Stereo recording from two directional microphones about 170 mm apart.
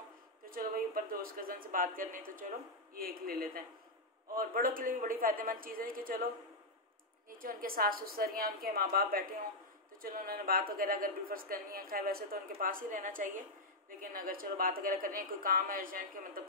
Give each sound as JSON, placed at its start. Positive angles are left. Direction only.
{"t": 0.5, "sound": "a sound", "side_deg": -55}
{"t": 2.9, "sound": "a man's voice", "side_deg": -60}
{"t": 7.2, "sound": "a man's voice", "side_deg": -55}